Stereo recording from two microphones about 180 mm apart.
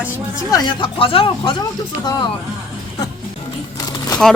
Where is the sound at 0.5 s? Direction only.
25° left (ahead or behind).